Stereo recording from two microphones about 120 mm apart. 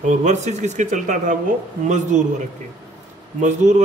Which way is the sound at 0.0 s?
80° right.